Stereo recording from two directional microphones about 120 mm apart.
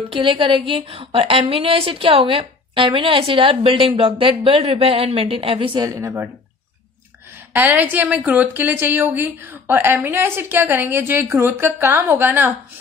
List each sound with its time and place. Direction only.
0.1 s a woman's voice: 45° right (ahead or behind)
5.9 s speech: 25° right (ahead or behind)
7.5 s a woman's voice: 15° right (ahead or behind)